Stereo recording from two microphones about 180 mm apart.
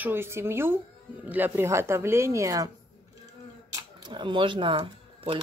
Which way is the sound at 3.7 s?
20° right (ahead or behind).